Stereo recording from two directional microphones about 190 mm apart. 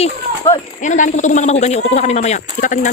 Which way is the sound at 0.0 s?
30° left (ahead or behind).